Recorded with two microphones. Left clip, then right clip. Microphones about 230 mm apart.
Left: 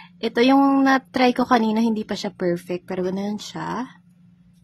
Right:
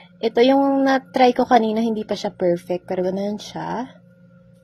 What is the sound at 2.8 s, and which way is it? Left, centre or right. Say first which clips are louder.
Speech: right 3 dB; left.